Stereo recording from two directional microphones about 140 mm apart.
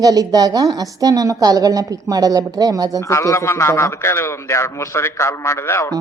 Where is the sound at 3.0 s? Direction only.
20° left (ahead or behind).